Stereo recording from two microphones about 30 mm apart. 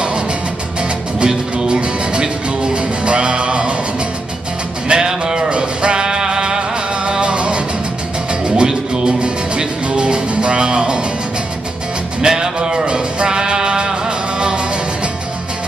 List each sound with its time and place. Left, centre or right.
1.2 s music: right
4.8 s music: right
7.1 s music: right
8.6 s music: right
12.2 s music: right